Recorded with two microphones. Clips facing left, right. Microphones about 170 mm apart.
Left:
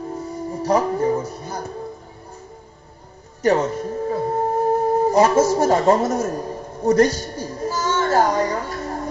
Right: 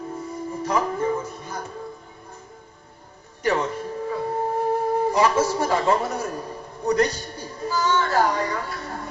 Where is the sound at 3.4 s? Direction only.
40° left (ahead or behind).